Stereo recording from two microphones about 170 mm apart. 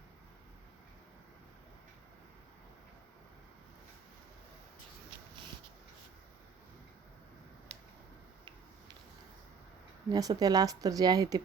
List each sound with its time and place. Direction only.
10.1 s speech: 20° right (ahead or behind)